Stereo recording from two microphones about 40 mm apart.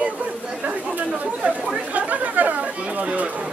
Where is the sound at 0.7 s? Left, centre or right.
Right.